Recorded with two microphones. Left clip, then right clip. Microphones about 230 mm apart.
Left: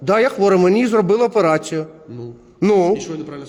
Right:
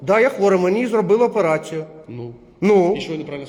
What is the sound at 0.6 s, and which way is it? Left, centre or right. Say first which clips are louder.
A man's voice: left 3 dB; left.